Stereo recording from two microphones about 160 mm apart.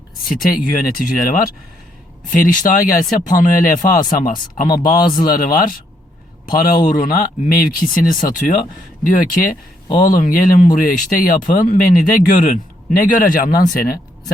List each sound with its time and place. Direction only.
0.3 s speech: 60° left (ahead or behind)
6.8 s speech: 50° left (ahead or behind)